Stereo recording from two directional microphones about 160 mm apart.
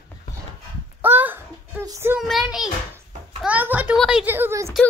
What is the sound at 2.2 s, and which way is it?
A child's voice, centre (ahead or behind).